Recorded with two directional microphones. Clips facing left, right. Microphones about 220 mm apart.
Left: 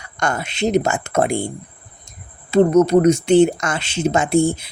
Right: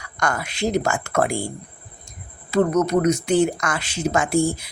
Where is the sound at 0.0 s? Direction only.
25° left (ahead or behind).